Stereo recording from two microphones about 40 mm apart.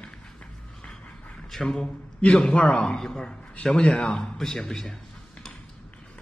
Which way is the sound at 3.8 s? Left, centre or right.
Left.